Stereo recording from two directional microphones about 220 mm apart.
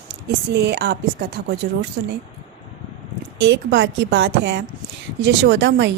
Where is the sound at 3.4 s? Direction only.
50° right (ahead or behind).